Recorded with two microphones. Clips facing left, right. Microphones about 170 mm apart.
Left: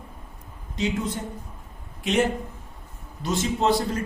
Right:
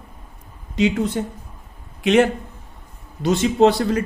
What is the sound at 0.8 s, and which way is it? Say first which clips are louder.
Speech: right 7 dB; 75° right (ahead or behind).